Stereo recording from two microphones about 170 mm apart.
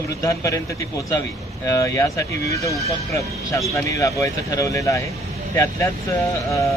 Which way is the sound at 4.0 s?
20° left (ahead or behind).